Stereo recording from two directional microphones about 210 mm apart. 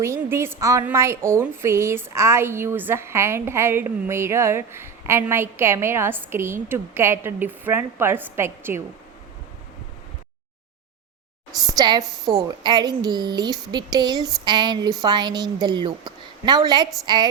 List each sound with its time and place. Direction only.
0.0 s a woman's voice: 10° right (ahead or behind)
11.6 s a woman's voice: 20° right (ahead or behind)